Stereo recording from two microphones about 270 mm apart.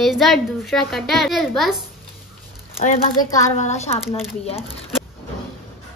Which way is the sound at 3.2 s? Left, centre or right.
Centre.